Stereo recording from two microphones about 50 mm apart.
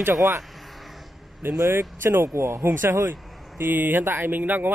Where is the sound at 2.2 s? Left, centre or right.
Right.